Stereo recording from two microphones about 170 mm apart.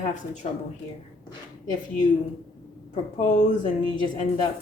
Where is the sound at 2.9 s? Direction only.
45° left (ahead or behind).